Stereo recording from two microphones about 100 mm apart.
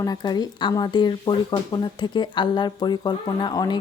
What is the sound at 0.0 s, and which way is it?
Speech, 40° left (ahead or behind).